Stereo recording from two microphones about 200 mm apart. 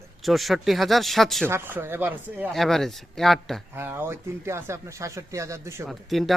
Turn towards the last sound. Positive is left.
turn(degrees=0)  # may be behind; listen again after turning